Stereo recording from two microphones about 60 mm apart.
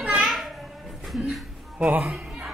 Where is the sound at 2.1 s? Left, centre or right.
Right.